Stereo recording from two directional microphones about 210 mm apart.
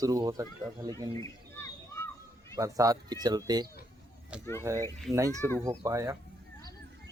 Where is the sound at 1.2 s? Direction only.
10° left (ahead or behind).